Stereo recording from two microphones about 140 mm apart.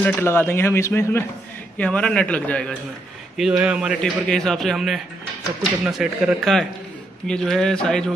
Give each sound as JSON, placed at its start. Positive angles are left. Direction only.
{"t": 0.0, "sound": "speech", "side_deg": 15}
{"t": 1.8, "sound": "speech", "side_deg": 10}
{"t": 3.3, "sound": "speech", "side_deg": -5}
{"t": 4.0, "sound": "a man's voice", "side_deg": 5}